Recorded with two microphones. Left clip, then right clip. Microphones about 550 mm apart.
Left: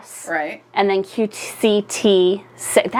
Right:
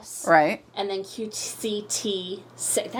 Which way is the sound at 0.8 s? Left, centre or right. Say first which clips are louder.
Left 12 dB; left.